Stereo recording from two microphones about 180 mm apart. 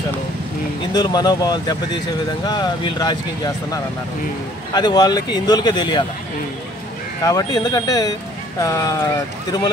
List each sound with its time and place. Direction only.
0.9 s speech: 20° left (ahead or behind)
7.2 s speech: 20° left (ahead or behind)